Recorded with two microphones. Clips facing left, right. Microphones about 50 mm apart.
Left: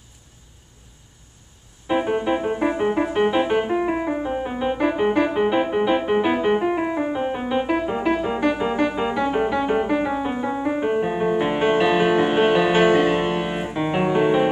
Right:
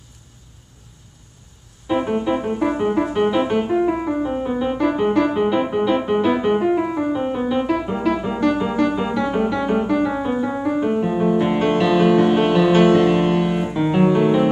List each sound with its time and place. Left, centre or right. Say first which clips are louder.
1.9 s music: right 1 dB; centre